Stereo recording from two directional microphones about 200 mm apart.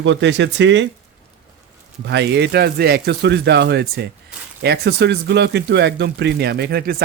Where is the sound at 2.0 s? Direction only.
60° right (ahead or behind).